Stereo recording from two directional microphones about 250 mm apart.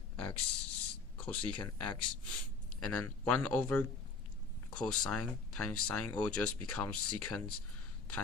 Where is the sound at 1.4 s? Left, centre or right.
Centre.